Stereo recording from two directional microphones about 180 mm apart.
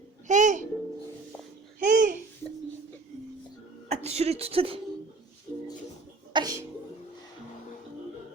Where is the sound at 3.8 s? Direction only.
35° right (ahead or behind).